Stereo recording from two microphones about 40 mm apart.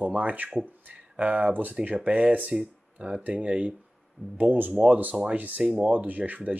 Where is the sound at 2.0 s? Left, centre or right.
Right.